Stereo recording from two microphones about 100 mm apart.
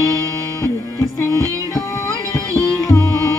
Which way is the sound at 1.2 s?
30° left (ahead or behind).